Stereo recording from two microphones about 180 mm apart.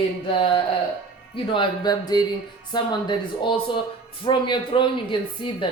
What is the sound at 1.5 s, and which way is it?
Speech, 25° left (ahead or behind).